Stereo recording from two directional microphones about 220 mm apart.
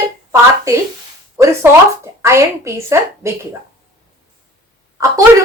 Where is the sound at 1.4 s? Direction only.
15° right (ahead or behind).